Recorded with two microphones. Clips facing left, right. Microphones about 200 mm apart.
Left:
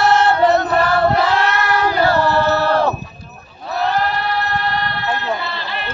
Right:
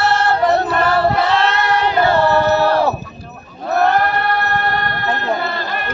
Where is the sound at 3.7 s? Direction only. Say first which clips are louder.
Right 4 dB; 55° right (ahead or behind).